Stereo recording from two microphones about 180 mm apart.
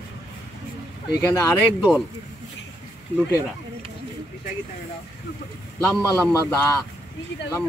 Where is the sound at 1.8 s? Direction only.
5° right (ahead or behind).